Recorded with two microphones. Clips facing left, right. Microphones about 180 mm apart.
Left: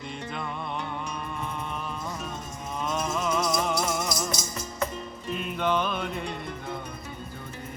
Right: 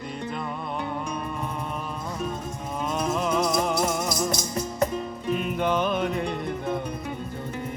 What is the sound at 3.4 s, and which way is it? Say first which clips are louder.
Music: right 3 dB; 55° right (ahead or behind).